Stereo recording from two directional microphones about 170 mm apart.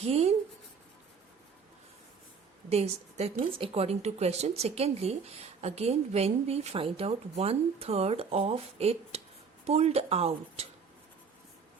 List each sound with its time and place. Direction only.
0.0 s speech: 40° right (ahead or behind)
2.6 s a woman's voice: 40° right (ahead or behind)